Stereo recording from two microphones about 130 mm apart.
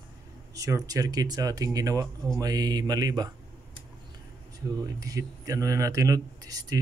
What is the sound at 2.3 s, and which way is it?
Mantra, 30° right (ahead or behind).